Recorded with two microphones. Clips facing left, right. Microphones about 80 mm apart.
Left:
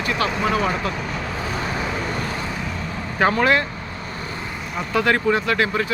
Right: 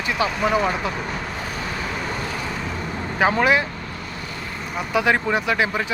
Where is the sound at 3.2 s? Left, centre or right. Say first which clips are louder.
Even; centre.